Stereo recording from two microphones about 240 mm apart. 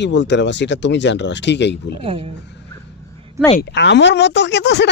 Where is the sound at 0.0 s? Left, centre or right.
Left.